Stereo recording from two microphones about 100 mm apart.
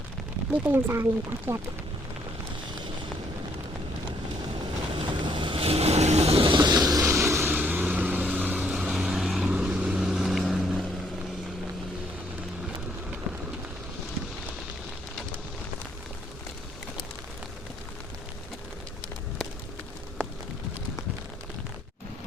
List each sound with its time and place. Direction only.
0.5 s speech: 20° right (ahead or behind)
4.9 s vehicle: 55° right (ahead or behind)
6.7 s vehicle: 40° right (ahead or behind); by 10.8 s centre (ahead or behind)